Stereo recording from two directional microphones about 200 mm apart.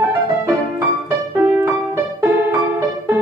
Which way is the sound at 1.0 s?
10° right (ahead or behind).